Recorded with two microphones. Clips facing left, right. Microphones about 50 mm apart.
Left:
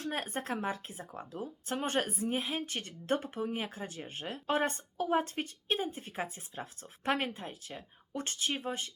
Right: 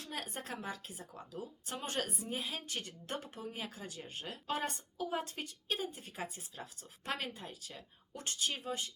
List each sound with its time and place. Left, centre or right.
0.0 s speech: left